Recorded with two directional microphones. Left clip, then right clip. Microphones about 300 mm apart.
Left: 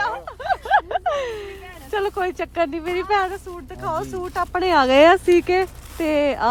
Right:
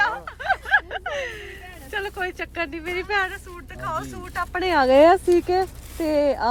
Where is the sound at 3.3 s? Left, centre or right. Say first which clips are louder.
Left 3 dB; centre.